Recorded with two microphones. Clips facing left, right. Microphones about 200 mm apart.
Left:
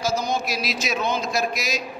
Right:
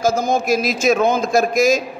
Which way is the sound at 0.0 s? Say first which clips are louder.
Right 7 dB; 50° right (ahead or behind).